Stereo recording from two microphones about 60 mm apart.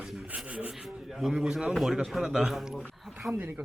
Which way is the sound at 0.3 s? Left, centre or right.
Centre.